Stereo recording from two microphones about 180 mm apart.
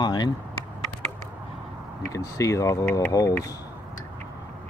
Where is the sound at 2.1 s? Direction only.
20° left (ahead or behind).